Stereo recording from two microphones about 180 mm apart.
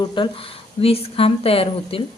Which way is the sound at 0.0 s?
25° left (ahead or behind).